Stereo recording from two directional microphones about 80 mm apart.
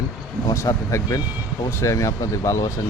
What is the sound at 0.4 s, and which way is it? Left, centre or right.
Speech, left.